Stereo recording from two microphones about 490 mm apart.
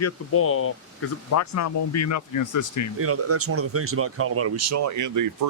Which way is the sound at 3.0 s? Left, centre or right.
Right.